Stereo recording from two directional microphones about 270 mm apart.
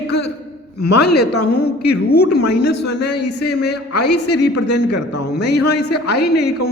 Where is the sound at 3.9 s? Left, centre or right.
Left.